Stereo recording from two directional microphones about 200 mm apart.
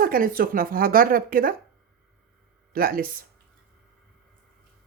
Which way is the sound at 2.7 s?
45° right (ahead or behind).